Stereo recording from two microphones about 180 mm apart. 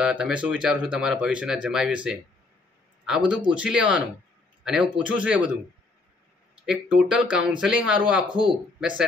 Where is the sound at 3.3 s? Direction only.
5° right (ahead or behind).